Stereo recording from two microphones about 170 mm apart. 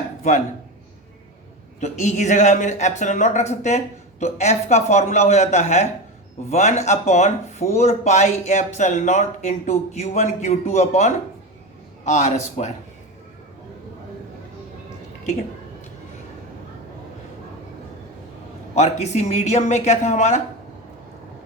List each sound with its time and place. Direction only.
1.8 s speech: 45° left (ahead or behind)
18.7 s speech: 40° left (ahead or behind)